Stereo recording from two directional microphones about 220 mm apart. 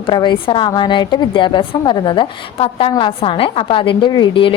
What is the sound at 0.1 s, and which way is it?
A woman's voice, 20° left (ahead or behind).